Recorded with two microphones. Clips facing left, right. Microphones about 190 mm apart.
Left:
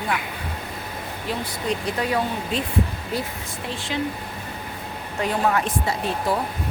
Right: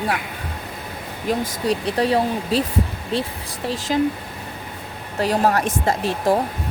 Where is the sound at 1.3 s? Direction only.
35° right (ahead or behind).